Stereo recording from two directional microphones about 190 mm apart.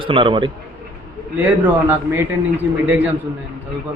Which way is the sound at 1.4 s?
10° right (ahead or behind).